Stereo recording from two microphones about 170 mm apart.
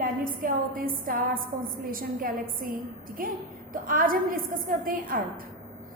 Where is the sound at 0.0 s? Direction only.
55° right (ahead or behind).